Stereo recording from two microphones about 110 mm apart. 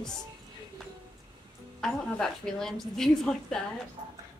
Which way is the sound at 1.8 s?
5° left (ahead or behind).